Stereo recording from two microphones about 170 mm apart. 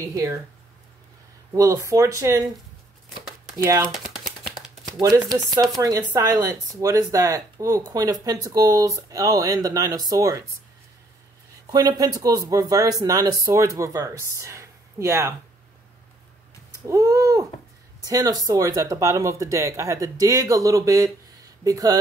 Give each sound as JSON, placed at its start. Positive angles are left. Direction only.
{"t": 0.0, "sound": "speech", "side_deg": -20}
{"t": 1.5, "sound": "speech", "side_deg": -20}
{"t": 3.5, "sound": "speech", "side_deg": -20}
{"t": 3.9, "sound": "a sound", "side_deg": 0}
{"t": 4.9, "sound": "speech", "side_deg": -20}
{"t": 11.7, "sound": "speech", "side_deg": -25}
{"t": 16.8, "sound": "speech", "side_deg": -15}